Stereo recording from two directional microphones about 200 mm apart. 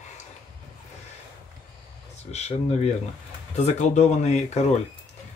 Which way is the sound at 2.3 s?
35° left (ahead or behind).